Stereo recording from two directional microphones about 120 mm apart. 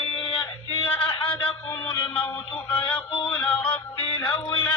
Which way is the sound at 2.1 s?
15° left (ahead or behind).